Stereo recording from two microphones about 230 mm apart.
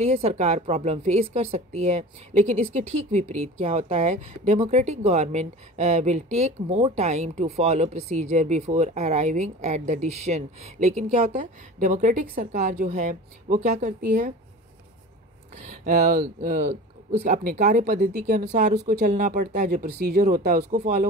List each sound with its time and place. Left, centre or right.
0.0 s a woman's voice: right
15.5 s speech: right